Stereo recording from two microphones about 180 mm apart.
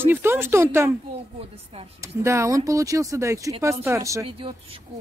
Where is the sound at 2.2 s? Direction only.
15° right (ahead or behind).